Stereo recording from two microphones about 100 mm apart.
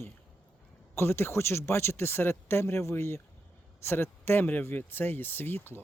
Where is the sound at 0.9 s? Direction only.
25° left (ahead or behind).